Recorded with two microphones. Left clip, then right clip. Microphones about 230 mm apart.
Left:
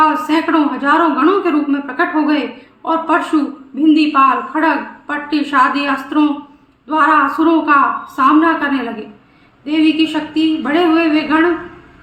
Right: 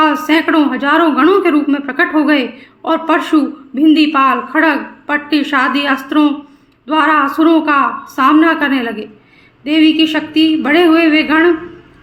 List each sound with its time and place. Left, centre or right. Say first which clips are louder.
0.0 s a woman's voice: right 1 dB; right